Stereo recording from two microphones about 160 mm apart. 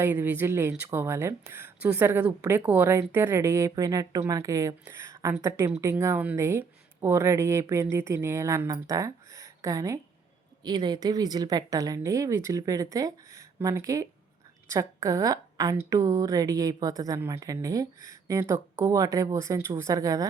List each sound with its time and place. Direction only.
0.0 s a woman's voice: 10° right (ahead or behind)